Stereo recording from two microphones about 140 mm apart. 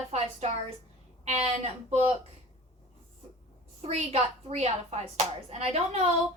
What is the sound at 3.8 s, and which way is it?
A woman's voice, 50° right (ahead or behind).